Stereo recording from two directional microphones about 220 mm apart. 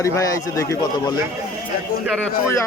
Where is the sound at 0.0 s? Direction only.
15° left (ahead or behind).